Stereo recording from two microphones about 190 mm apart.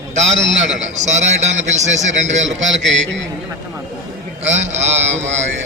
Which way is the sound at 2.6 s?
75° right (ahead or behind).